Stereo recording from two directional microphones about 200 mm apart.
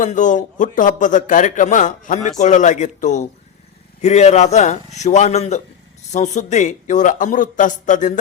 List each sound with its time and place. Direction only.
0.0 s a man's voice: 40° left (ahead or behind)